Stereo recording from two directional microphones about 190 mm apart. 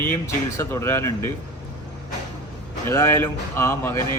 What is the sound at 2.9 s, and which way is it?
A man's voice, 15° left (ahead or behind).